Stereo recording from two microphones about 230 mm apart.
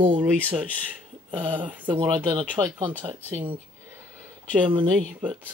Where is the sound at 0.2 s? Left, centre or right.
Centre.